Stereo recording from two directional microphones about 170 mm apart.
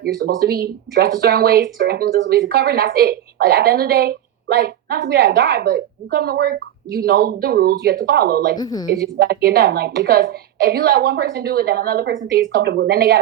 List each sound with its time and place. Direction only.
0.0 s speech: 65° right (ahead or behind)
8.5 s a woman's voice: 25° left (ahead or behind)
9.2 s a woman's voice: 65° right (ahead or behind)